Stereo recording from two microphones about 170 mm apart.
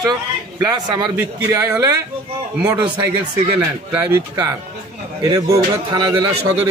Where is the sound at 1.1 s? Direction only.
15° right (ahead or behind).